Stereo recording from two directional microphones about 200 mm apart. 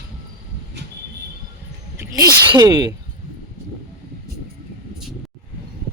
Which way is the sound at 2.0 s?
15° right (ahead or behind).